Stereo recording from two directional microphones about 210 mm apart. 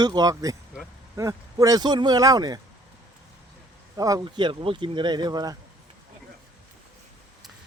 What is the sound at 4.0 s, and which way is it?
Speech, 15° right (ahead or behind).